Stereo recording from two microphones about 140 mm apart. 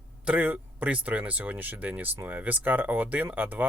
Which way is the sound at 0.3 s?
10° right (ahead or behind).